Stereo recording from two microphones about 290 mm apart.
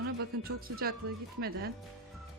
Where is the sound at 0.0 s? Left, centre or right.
Right.